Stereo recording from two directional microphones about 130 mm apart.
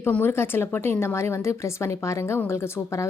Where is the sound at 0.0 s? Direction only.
15° left (ahead or behind).